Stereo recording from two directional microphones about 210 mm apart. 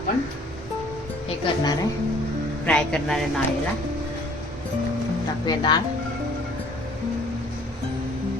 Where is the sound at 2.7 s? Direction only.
5° left (ahead or behind).